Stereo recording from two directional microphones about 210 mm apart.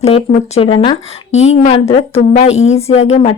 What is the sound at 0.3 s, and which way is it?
A woman's voice, 35° left (ahead or behind).